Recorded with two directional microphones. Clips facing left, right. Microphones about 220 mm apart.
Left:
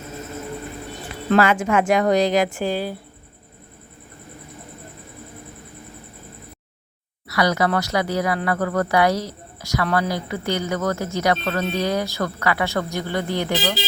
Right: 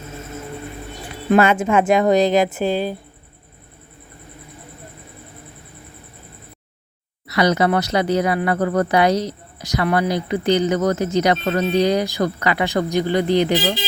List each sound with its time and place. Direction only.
1.4 s speech: 25° right (ahead or behind)
7.3 s speech: 20° right (ahead or behind)